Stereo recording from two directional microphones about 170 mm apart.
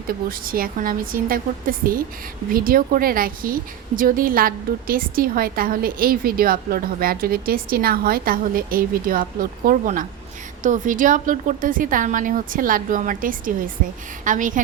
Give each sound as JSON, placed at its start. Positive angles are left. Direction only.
{"t": 0.1, "sound": "a woman's voice", "side_deg": -60}